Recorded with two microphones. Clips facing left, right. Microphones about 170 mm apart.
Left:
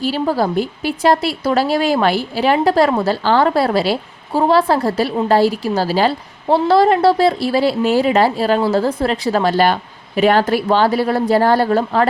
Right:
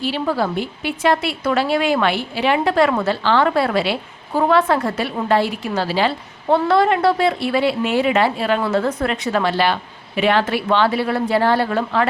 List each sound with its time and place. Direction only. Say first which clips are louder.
0.0 s a woman's voice: left 3 dB; 40° left (ahead or behind)